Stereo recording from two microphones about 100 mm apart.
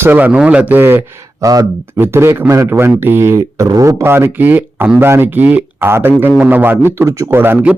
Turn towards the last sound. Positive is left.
turn(degrees=-20)  # may be behind; listen again after turning